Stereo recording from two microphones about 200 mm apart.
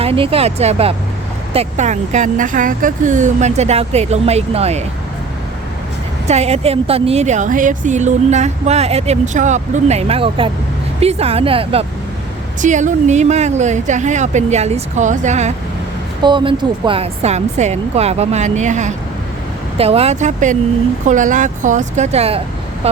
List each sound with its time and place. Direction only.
0.0 s a woman's voice: 30° right (ahead or behind)
6.2 s a woman's voice: 35° right (ahead or behind)
16.2 s a woman's voice: 25° right (ahead or behind)